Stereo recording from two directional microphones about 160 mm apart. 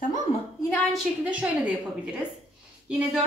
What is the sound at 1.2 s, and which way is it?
A woman's voice, 10° right (ahead or behind).